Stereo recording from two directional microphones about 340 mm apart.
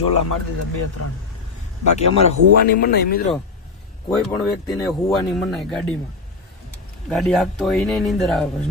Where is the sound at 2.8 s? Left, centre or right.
Left.